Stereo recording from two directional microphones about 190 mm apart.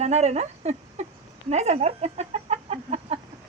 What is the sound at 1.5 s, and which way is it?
Chicken, 35° right (ahead or behind).